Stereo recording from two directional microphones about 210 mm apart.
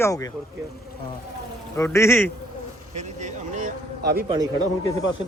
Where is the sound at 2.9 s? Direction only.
35° right (ahead or behind).